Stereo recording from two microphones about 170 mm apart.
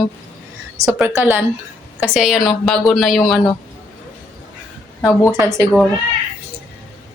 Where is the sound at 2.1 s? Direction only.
Centre (ahead or behind).